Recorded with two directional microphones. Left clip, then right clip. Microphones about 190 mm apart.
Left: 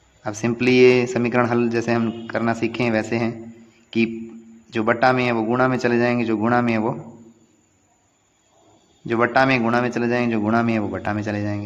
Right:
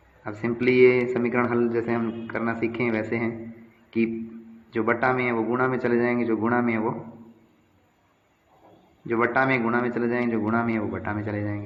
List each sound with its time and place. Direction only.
0.3 s a man's voice: 50° left (ahead or behind)
9.0 s speech: 50° left (ahead or behind)